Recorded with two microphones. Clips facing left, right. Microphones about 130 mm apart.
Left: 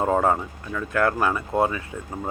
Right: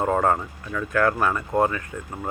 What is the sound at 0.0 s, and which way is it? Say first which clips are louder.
Speech: even; 15° left (ahead or behind).